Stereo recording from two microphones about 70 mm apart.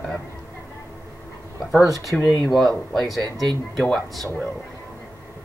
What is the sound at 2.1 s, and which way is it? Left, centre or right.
Speech, centre.